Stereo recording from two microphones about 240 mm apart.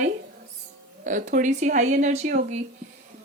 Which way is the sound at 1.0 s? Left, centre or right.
Right.